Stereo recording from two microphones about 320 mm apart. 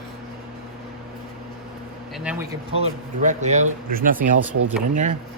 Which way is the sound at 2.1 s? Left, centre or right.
Centre.